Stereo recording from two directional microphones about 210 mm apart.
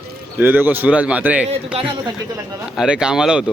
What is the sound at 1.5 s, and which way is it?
Speech, 30° right (ahead or behind).